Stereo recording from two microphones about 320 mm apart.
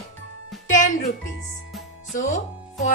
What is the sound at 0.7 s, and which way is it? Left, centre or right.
Speech, left.